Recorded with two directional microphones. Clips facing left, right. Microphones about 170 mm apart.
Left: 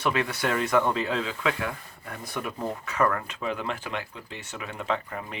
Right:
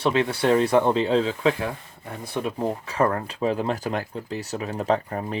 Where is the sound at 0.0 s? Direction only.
30° right (ahead or behind).